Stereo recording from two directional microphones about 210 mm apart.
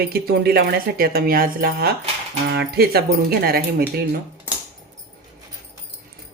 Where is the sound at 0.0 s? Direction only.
45° right (ahead or behind).